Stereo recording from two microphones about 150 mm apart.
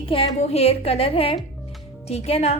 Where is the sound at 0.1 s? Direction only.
40° left (ahead or behind).